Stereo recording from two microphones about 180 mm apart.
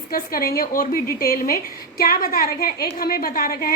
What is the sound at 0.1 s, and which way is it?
A woman's voice, 55° left (ahead or behind).